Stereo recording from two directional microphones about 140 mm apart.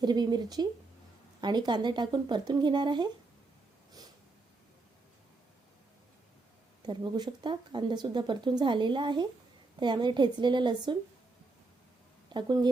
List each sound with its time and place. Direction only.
0.0 s speech: 30° right (ahead or behind)
6.8 s speech: 30° right (ahead or behind)
12.3 s speech: 30° right (ahead or behind)